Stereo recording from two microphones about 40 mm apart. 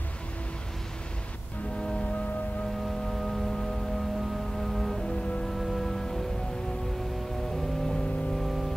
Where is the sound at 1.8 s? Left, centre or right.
Left.